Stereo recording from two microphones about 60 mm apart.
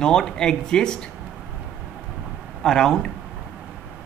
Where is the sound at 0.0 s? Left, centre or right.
Centre.